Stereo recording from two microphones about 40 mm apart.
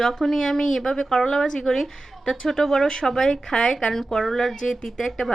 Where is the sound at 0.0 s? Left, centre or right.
Centre.